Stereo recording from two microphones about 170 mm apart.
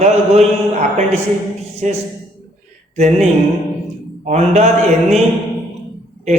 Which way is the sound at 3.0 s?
45° right (ahead or behind).